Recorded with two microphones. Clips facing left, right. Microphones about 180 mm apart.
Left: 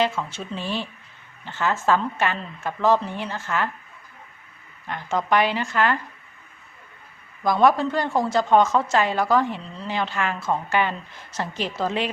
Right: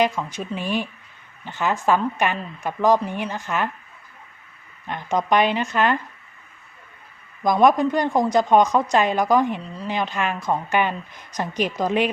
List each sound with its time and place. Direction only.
0.0 s a woman's voice: 15° right (ahead or behind)
4.9 s speech: 20° right (ahead or behind)
7.4 s a woman's voice: 20° right (ahead or behind)